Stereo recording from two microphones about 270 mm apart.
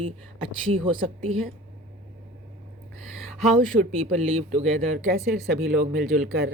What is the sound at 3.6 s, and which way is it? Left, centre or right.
Speech, right.